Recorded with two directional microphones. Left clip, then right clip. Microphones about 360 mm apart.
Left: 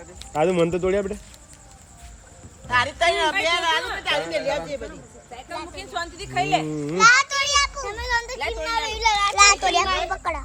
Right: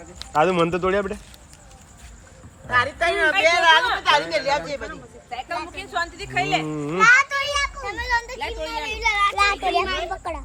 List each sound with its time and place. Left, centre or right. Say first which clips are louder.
0.3 s speech: right 2 dB; centre
2.6 s a woman's voice: even; centre
5.5 s a woman's voice: right 2 dB; centre
6.7 s speech: right 1 dB; centre
7.0 s a woman's voice: even; centre
9.3 s children playing: left 3 dB; left
10.1 s speech: left 3 dB; left